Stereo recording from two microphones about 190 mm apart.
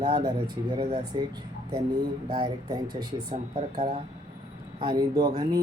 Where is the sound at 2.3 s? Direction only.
20° right (ahead or behind).